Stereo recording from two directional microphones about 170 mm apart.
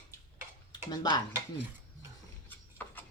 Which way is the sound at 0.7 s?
25° left (ahead or behind).